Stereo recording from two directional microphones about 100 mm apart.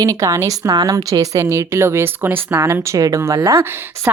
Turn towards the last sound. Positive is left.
turn(degrees=-30)  # may be behind; listen again after turning